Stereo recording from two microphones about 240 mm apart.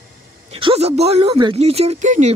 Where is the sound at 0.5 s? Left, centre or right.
Right.